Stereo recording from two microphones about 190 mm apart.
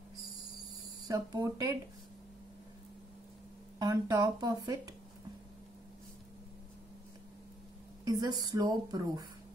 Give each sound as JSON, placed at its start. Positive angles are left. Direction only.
{"t": 1.0, "sound": "a woman's voice", "side_deg": -20}
{"t": 3.8, "sound": "a woman's voice", "side_deg": -15}
{"t": 8.0, "sound": "a woman's voice", "side_deg": -20}